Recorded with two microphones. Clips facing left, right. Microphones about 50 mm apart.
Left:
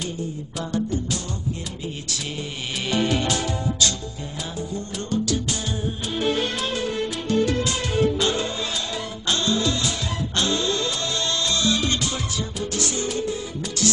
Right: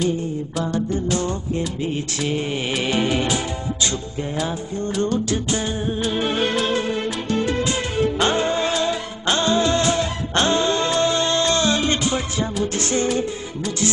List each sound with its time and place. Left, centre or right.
1.0 s music: right
5.3 s music: right
8.2 s music: right